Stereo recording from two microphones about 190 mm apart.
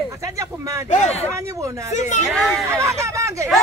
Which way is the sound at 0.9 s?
35° left (ahead or behind).